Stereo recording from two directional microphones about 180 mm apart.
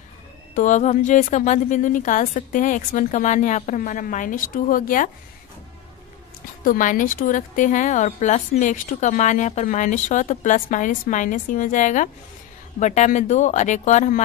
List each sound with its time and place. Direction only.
0.6 s speech: 40° left (ahead or behind)
6.6 s speech: 50° left (ahead or behind)